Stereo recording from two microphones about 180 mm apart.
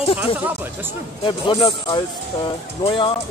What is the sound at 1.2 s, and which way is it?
Speech, 25° left (ahead or behind).